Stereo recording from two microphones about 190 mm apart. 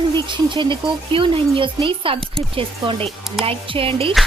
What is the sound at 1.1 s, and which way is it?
Speech, 25° right (ahead or behind).